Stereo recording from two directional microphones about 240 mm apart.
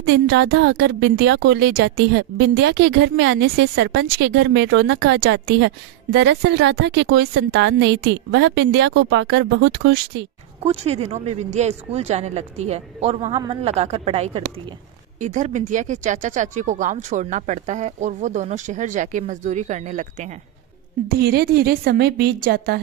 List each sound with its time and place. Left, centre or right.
0.0 s a woman's voice: right
10.6 s speech: right